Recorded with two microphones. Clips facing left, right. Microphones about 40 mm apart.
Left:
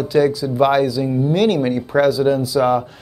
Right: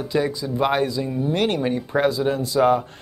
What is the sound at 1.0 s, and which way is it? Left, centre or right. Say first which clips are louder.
Speech: left 5 dB; centre.